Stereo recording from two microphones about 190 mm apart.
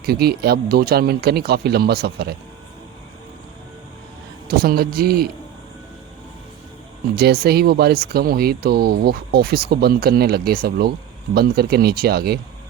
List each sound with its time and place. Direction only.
0.0 s speech: 55° right (ahead or behind)
4.4 s a man's voice: 55° right (ahead or behind)
7.2 s speech: 55° right (ahead or behind)